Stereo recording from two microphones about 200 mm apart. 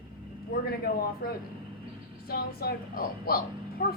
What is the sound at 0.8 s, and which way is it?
Speech, 50° left (ahead or behind).